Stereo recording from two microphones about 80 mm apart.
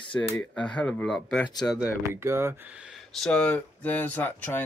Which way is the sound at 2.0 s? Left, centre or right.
Right.